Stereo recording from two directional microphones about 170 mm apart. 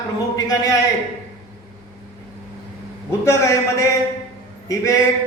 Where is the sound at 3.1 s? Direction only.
15° left (ahead or behind).